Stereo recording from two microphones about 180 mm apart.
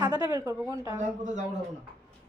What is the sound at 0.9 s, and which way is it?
Speech, 45° right (ahead or behind).